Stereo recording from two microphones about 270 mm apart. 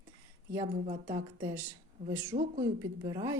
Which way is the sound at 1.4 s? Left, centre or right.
Centre.